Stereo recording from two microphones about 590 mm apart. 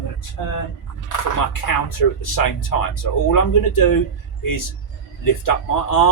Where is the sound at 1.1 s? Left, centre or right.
Left.